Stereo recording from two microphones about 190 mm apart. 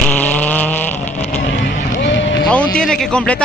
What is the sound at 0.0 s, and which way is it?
Vehicle, 10° left (ahead or behind).